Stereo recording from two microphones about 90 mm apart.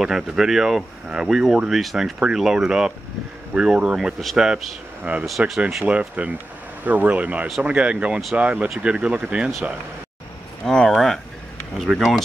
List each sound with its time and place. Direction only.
0.0 s speech: 5° right (ahead or behind)
5.1 s speech: 15° right (ahead or behind)
10.6 s speech: 5° left (ahead or behind)